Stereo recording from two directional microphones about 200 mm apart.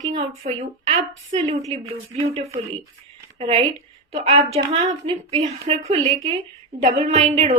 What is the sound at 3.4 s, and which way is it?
Speech, 30° right (ahead or behind).